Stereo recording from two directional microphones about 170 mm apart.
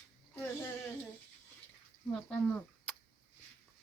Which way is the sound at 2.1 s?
5° left (ahead or behind).